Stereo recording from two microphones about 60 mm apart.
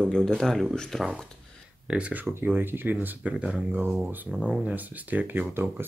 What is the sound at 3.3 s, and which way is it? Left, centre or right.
Speech, centre.